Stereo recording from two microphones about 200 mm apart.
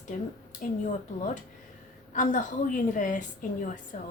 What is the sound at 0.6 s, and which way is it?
Speech, 40° left (ahead or behind).